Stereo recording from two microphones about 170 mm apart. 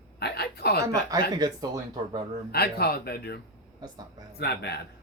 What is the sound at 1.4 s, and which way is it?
Speech, 25° right (ahead or behind).